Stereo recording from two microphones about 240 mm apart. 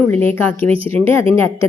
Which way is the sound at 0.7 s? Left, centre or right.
Right.